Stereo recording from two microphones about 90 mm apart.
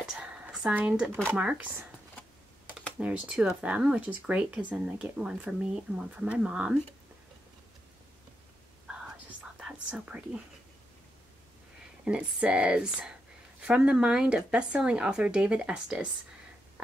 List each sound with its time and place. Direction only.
0.0 s a sound: 5° right (ahead or behind)
0.7 s speech: 15° right (ahead or behind)
3.0 s speech: 15° right (ahead or behind)
9.6 s speech: 10° right (ahead or behind)
12.0 s speech: 10° right (ahead or behind)